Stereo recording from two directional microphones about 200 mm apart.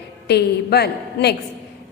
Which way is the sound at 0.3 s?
55° left (ahead or behind).